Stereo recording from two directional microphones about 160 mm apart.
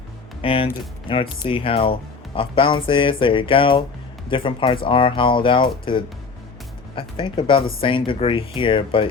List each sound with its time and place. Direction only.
0.4 s speech: 35° left (ahead or behind)